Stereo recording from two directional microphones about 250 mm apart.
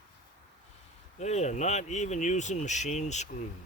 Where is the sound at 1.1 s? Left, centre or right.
Left.